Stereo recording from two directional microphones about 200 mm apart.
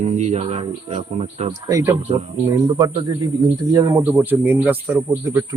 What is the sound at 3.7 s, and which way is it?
Speech, 15° right (ahead or behind).